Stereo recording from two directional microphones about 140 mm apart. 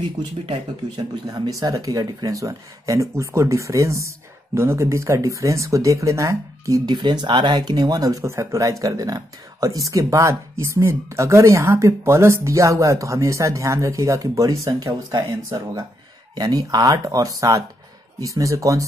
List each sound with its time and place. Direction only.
0.9 s speech: 30° right (ahead or behind)